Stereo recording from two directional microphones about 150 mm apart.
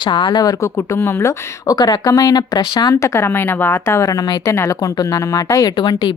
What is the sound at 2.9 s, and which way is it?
Speech, 15° left (ahead or behind).